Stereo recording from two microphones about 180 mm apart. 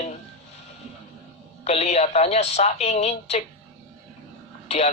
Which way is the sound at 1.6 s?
35° left (ahead or behind).